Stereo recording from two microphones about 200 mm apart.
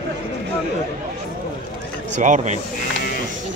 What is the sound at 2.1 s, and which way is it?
Speech, 40° right (ahead or behind).